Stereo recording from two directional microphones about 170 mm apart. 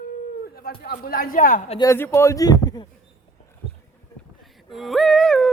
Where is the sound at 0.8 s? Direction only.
60° left (ahead or behind).